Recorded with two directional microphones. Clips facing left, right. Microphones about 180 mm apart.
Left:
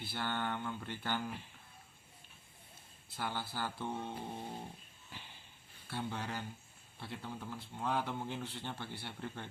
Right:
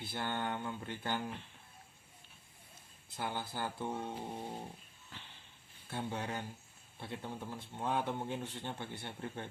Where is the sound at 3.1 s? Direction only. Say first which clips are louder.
Right 1 dB; 20° right (ahead or behind).